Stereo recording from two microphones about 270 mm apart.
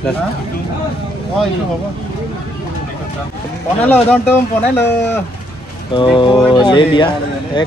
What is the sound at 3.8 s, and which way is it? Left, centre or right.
Speech, centre.